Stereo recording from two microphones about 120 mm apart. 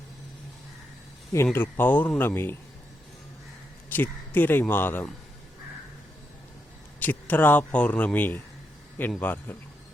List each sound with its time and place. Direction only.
1.5 s speech: 15° left (ahead or behind)
3.8 s speech: 15° left (ahead or behind)
7.0 s speech: 15° left (ahead or behind)